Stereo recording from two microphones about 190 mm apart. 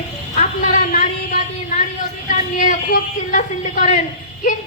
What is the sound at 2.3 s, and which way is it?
A woman's voice, 40° left (ahead or behind).